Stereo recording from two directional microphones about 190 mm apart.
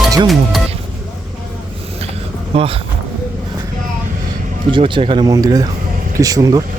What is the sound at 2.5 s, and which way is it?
Speech, 30° right (ahead or behind).